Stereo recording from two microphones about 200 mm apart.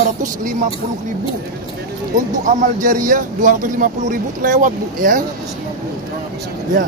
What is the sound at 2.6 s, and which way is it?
Speech, 40° right (ahead or behind).